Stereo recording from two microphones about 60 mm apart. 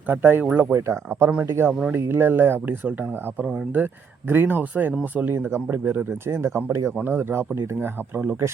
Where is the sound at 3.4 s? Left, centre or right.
Right.